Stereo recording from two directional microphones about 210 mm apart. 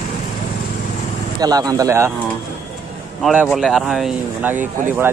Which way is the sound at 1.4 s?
15° right (ahead or behind).